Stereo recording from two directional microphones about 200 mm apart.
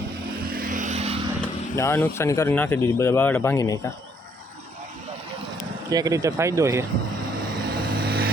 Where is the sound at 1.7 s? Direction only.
15° left (ahead or behind).